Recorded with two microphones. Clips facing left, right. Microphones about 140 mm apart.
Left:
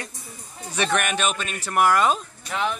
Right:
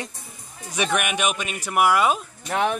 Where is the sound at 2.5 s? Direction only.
55° right (ahead or behind).